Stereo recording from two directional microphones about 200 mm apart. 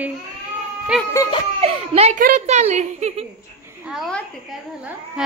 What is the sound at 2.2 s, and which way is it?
A woman's voice, 35° right (ahead or behind).